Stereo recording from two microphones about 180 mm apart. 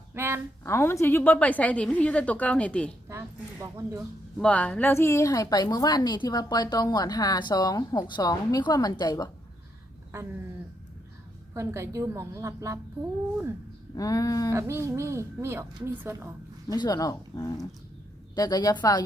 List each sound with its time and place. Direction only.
0.1 s a sound: 15° right (ahead or behind)
0.6 s a woman's voice: 15° left (ahead or behind)
3.1 s a sound: 15° right (ahead or behind)
4.4 s a woman's voice: 5° left (ahead or behind); by 9.3 s 20° left (ahead or behind)
11.5 s a child's voice: 15° right (ahead or behind)
13.9 s a woman's voice: 20° left (ahead or behind)
14.5 s a child's voice: 15° right (ahead or behind)
16.6 s a woman's voice: 20° left (ahead or behind)